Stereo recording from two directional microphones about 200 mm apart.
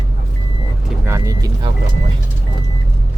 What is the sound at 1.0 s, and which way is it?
Speech, 15° right (ahead or behind).